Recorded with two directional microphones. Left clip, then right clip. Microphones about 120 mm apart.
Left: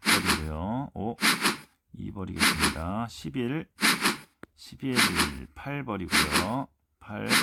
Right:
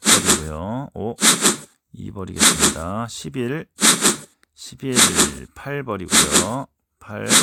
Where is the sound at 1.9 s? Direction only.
40° right (ahead or behind).